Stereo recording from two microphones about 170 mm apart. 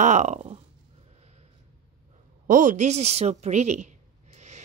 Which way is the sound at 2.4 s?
50° right (ahead or behind).